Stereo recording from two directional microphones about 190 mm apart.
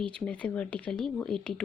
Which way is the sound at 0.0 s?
5° left (ahead or behind).